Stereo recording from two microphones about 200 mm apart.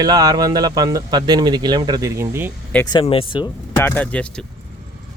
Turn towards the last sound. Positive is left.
turn(degrees=5)  # may be behind; listen again after turning